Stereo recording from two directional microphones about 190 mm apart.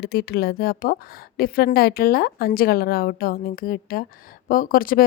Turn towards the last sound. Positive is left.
turn(degrees=50)  # may be behind; listen again after turning